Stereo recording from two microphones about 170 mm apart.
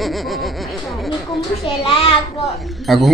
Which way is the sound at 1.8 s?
35° left (ahead or behind).